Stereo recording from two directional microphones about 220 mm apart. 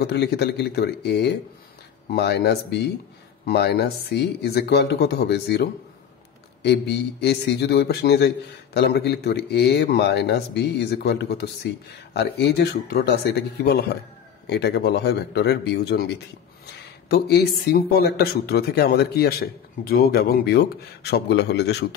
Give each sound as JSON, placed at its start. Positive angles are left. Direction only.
{"t": 0.0, "sound": "a man's voice", "side_deg": 45}